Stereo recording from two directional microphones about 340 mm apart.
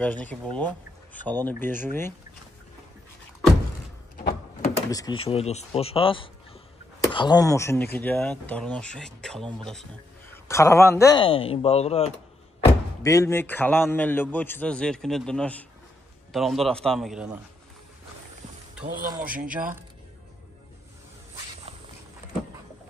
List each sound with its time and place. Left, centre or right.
0.0 s speech: centre
1.7 s speech: right
4.2 s a sound: left
5.2 s speech: centre
18.8 s speech: centre
19.2 s speech: right